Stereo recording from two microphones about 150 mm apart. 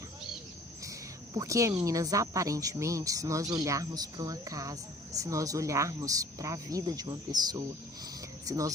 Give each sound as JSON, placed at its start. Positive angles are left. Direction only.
{"t": 0.9, "sound": "speech", "side_deg": -25}